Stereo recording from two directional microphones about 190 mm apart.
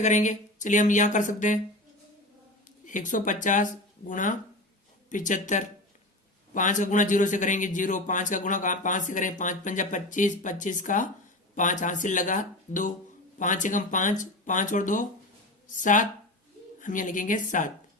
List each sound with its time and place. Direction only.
0.0 s a man's voice: 40° left (ahead or behind)
2.8 s a man's voice: 45° left (ahead or behind)